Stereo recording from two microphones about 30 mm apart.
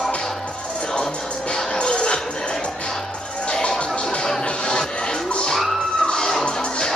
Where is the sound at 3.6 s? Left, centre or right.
Left.